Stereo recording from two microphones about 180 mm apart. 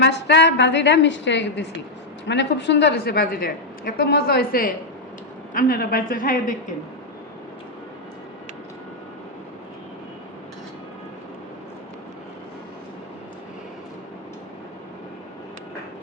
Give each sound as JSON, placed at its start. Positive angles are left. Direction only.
{"t": 0.0, "sound": "a woman's voice", "side_deg": 70}